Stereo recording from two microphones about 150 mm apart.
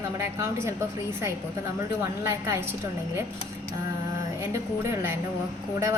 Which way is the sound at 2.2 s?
20° right (ahead or behind).